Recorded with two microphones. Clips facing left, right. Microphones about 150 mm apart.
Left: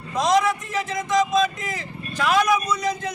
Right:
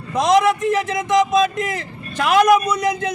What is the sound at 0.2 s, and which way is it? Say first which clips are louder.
A man's voice: right 5 dB; 60° right (ahead or behind).